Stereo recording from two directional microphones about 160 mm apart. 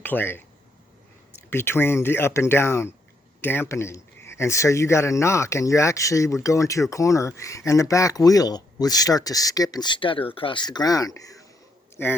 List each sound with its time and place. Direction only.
0.0 s speech: 10° left (ahead or behind)
1.5 s speech: 15° left (ahead or behind)